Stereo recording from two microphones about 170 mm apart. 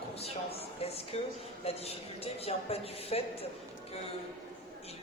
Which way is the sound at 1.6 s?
35° left (ahead or behind).